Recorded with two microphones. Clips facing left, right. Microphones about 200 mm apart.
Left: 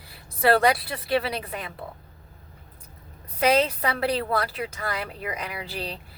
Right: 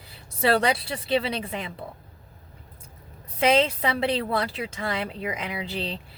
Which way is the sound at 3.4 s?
25° right (ahead or behind).